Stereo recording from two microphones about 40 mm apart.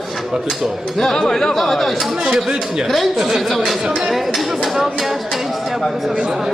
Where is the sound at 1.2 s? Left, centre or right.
Centre.